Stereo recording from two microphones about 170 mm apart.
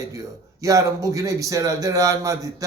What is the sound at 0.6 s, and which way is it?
A man's voice, 20° right (ahead or behind).